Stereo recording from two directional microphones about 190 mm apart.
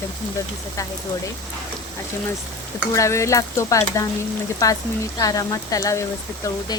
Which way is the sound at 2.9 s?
15° left (ahead or behind).